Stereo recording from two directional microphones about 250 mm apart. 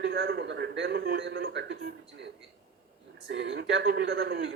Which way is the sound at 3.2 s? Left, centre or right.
Right.